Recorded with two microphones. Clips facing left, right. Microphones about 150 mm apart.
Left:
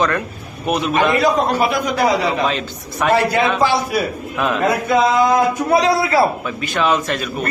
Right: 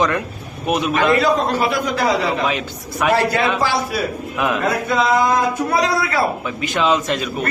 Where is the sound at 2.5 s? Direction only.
10° right (ahead or behind).